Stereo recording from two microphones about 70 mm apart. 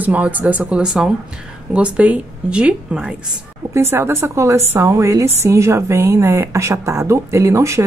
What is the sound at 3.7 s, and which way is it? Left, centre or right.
A woman's voice, right.